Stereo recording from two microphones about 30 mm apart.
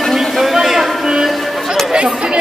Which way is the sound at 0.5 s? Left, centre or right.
Centre.